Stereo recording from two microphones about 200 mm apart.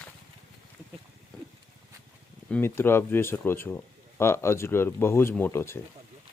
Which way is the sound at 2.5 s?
10° left (ahead or behind).